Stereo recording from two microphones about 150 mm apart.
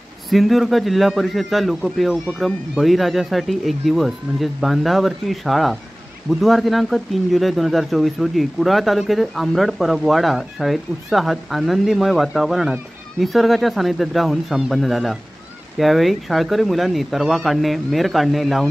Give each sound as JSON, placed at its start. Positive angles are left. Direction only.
{"t": 0.3, "sound": "speech", "side_deg": 0}